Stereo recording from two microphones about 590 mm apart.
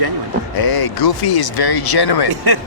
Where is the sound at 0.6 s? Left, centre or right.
Left.